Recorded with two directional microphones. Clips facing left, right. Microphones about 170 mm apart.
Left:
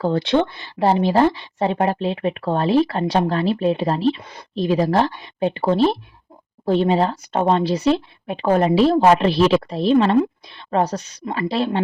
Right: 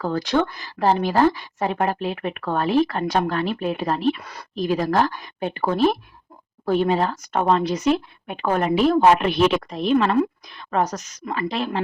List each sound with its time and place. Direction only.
0.0 s speech: 30° left (ahead or behind)